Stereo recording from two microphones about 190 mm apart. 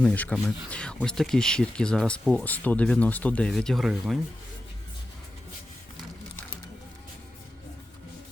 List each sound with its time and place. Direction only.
0.0 s speech: 5° left (ahead or behind)